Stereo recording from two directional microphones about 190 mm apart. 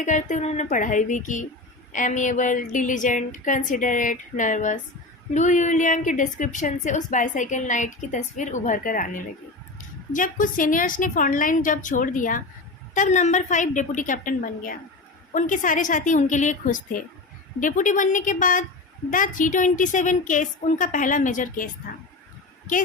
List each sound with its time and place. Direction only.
0.0 s a woman's voice: 40° left (ahead or behind)